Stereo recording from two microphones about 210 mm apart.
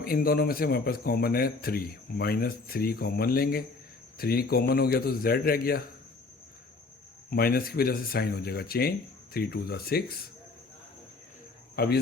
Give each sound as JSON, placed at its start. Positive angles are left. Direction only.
{"t": 0.0, "sound": "speech", "side_deg": 45}
{"t": 7.3, "sound": "speech", "side_deg": 45}
{"t": 11.8, "sound": "speech", "side_deg": 45}